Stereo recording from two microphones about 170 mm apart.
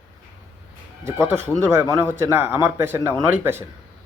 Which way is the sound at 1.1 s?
15° right (ahead or behind).